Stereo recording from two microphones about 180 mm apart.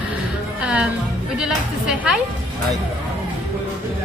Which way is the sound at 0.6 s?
5° right (ahead or behind).